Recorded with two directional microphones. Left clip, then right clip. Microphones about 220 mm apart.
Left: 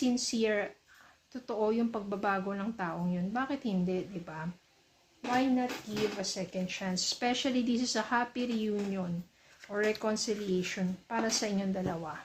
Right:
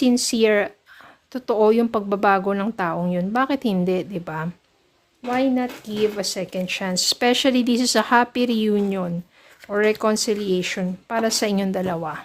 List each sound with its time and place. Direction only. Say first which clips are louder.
0.0 s speech: right 13 dB; 50° right (ahead or behind)
6.1 s speech: right 11 dB; 50° right (ahead or behind)